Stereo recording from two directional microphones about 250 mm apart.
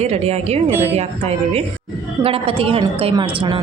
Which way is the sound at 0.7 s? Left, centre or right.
Centre.